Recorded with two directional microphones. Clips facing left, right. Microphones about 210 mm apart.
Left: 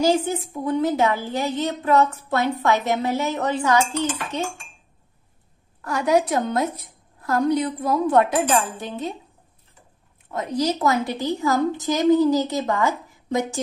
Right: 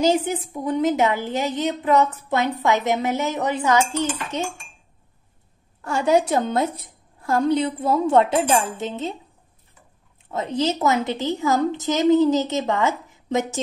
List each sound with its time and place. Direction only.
0.0 s a woman's voice: 20° right (ahead or behind)
5.9 s a woman's voice: 25° right (ahead or behind)
10.3 s a woman's voice: 25° right (ahead or behind)